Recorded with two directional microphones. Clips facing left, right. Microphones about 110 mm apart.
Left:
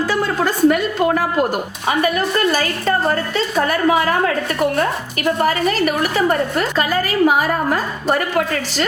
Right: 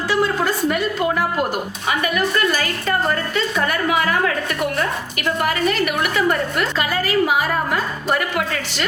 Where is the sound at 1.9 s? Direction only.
35° left (ahead or behind).